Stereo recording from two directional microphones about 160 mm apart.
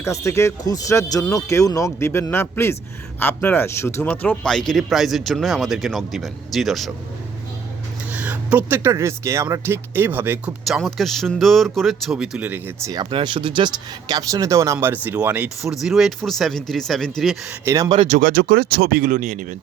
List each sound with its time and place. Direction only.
0.0 s speech: 20° left (ahead or behind); by 6.9 s centre (ahead or behind)
8.1 s speech: 10° right (ahead or behind)
10.8 s speech: centre (ahead or behind)
12.9 s speech: 30° right (ahead or behind); by 17.8 s 10° right (ahead or behind)
17.8 s speech: 40° right (ahead or behind)
18.2 s speech: 65° right (ahead or behind)